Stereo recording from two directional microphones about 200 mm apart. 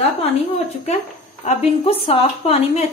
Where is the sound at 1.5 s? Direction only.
30° left (ahead or behind).